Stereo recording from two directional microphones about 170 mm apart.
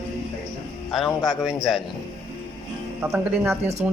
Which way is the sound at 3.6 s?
40° right (ahead or behind).